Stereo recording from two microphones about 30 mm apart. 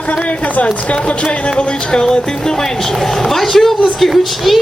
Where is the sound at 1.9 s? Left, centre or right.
Left.